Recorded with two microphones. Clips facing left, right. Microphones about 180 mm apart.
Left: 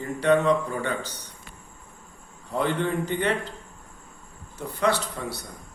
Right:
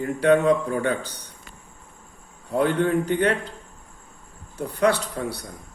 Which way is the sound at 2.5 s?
50° right (ahead or behind).